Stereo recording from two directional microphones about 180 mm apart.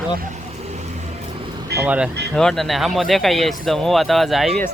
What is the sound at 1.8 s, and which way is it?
Speech, 5° right (ahead or behind).